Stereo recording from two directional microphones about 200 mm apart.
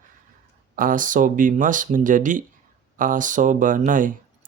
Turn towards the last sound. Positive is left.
turn(degrees=-40)  # may be behind; listen again after turning